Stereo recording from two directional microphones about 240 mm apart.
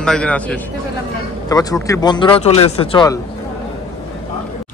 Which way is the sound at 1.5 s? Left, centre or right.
Centre.